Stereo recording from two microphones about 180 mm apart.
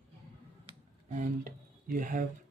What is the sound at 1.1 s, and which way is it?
Speech, 45° right (ahead or behind).